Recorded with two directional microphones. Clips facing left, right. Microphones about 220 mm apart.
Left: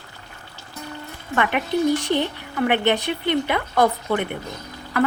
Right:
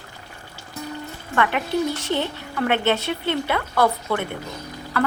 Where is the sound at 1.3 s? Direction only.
15° left (ahead or behind).